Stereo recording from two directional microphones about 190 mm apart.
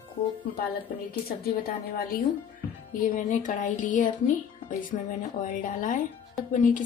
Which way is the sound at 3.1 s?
45° left (ahead or behind).